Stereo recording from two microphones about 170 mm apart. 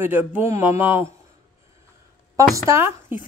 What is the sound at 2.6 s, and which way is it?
Speech, 15° right (ahead or behind).